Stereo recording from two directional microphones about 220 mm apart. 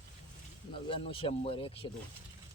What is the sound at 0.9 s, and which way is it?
Speech, 25° left (ahead or behind).